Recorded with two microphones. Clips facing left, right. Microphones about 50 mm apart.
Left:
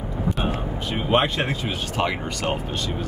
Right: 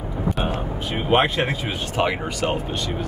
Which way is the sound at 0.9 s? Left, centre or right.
Centre.